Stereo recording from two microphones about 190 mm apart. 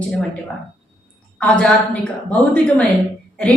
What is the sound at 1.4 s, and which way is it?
Speech, 5° left (ahead or behind).